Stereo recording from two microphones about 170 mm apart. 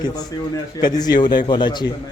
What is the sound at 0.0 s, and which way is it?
Speech, 20° left (ahead or behind).